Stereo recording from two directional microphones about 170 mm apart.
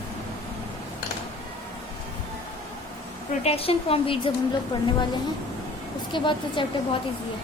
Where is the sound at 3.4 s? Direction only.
35° left (ahead or behind).